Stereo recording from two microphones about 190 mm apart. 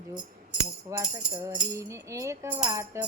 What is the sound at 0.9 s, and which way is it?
Music, 15° right (ahead or behind).